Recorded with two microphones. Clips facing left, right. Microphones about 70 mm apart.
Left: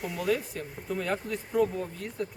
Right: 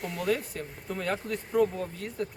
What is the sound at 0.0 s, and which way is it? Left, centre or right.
Speech, centre.